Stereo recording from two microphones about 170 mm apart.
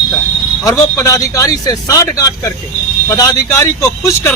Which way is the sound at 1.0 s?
20° left (ahead or behind).